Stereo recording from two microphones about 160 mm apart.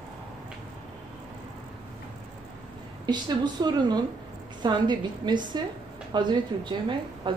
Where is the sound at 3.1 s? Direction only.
25° right (ahead or behind).